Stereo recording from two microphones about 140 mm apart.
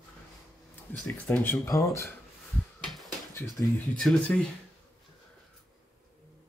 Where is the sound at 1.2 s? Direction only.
10° left (ahead or behind).